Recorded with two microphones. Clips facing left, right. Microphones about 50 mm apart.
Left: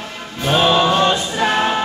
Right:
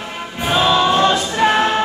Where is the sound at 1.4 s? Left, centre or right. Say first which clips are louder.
Right 3 dB; centre.